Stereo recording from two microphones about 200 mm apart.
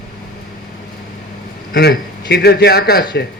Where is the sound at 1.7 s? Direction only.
50° left (ahead or behind).